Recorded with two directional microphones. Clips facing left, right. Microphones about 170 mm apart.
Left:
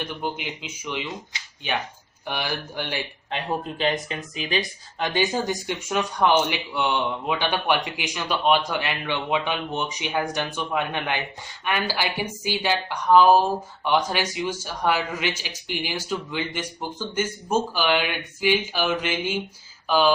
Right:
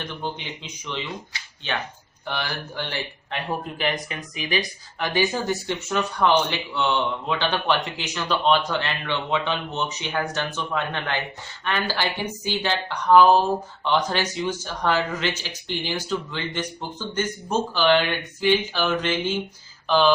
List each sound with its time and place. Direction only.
0.0 s speech: 10° left (ahead or behind)